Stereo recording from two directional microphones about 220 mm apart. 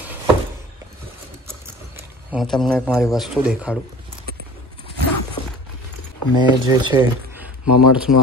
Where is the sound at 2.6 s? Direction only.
Centre (ahead or behind).